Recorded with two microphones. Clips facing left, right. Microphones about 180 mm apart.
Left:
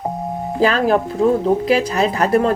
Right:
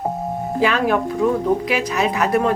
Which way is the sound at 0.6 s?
35° left (ahead or behind).